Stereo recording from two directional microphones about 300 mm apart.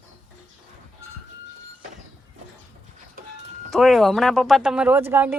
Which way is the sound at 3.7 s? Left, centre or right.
Centre.